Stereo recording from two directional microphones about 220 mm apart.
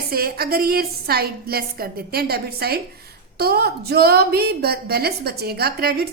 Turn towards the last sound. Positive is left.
turn(degrees=-45)  # may be behind; listen again after turning